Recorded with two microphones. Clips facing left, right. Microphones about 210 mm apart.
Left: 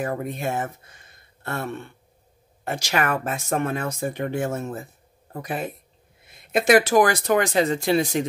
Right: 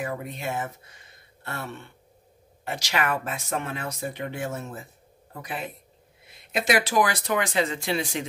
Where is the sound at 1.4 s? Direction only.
50° left (ahead or behind).